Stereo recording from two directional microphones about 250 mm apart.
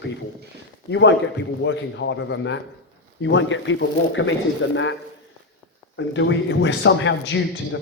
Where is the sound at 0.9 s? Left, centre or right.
Left.